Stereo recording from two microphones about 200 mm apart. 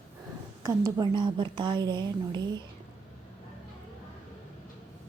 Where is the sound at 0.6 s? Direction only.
15° right (ahead or behind).